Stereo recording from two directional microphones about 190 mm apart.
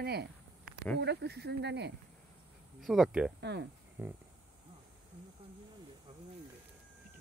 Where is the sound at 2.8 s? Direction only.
Centre (ahead or behind).